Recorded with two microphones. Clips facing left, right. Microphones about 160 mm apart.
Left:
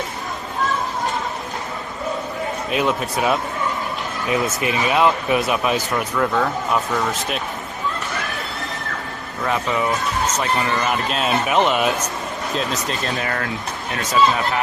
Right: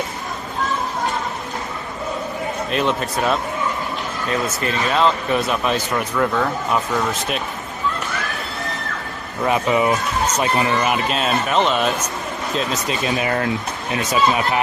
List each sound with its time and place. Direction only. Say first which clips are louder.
2.6 s speech: even; 5° left (ahead or behind)
9.4 s speech: right 4 dB; 20° right (ahead or behind); by 11.5 s centre (ahead or behind)
11.5 s speech: left 1 dB; 10° left (ahead or behind)
12.5 s speech: right 2 dB; centre (ahead or behind)
13.1 s speech: right 7 dB; 20° right (ahead or behind)